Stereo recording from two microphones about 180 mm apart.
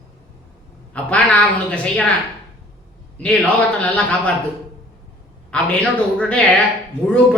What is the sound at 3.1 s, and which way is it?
Speech, 5° left (ahead or behind).